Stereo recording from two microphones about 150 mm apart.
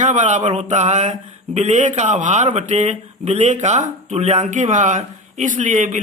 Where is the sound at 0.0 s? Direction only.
55° right (ahead or behind).